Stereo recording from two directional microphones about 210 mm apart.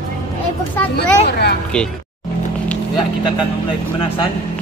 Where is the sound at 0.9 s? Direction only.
50° left (ahead or behind).